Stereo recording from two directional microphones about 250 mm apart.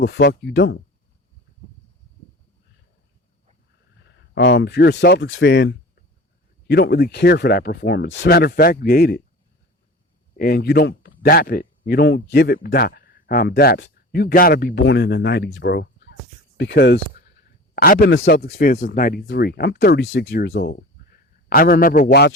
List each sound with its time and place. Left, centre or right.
0.0 s speech: left
4.4 s speech: left
10.3 s speech: left